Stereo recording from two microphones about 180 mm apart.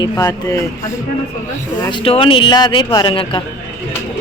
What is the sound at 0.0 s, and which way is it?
Speech, 20° left (ahead or behind).